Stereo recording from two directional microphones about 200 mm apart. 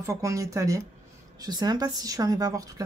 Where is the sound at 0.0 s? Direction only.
15° right (ahead or behind).